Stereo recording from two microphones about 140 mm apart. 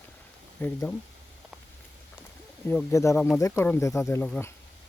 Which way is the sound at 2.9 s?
20° left (ahead or behind).